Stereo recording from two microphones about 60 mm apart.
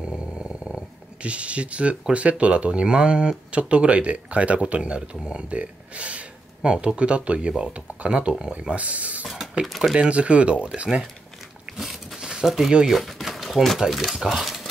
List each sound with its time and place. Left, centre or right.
1.2 s speech: centre
5.5 s speech: right
9.7 s speech: centre
9.9 s speech: centre
11.7 s biting: centre
12.3 s speech: centre